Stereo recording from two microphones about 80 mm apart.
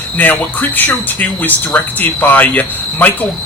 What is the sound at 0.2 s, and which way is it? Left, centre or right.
Speech, left.